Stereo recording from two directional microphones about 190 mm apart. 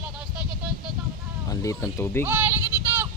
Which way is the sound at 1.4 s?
15° left (ahead or behind).